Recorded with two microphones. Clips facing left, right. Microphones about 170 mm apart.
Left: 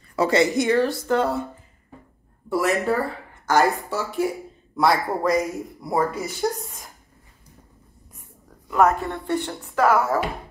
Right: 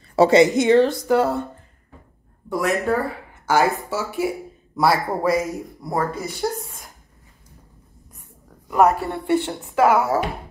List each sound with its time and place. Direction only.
0.1 s a woman's voice: 25° right (ahead or behind)
1.0 s speech: 5° right (ahead or behind)
2.5 s speech: centre (ahead or behind)
5.8 s speech: 10° left (ahead or behind)
6.4 s speech: centre (ahead or behind)
8.6 s speech: 10° right (ahead or behind)